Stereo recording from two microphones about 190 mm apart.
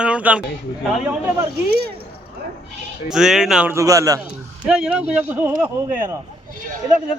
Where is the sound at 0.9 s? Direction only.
5° right (ahead or behind).